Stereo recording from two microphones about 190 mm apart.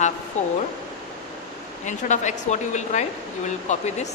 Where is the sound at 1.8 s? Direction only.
40° left (ahead or behind).